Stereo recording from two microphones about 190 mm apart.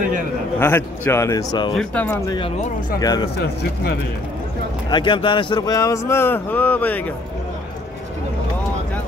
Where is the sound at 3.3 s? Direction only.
60° left (ahead or behind).